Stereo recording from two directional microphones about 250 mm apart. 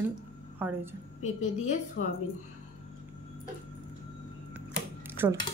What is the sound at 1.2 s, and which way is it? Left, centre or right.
Speech, left.